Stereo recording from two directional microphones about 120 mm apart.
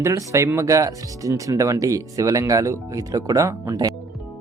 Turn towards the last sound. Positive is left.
turn(degrees=-30)  # may be behind; listen again after turning